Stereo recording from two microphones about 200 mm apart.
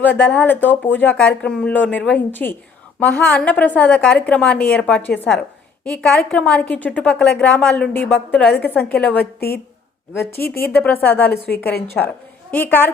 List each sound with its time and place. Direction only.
0.0 s a woman's voice: 10° left (ahead or behind)
11.3 s a woman's voice: 55° left (ahead or behind)
11.9 s a woman's voice: 10° left (ahead or behind)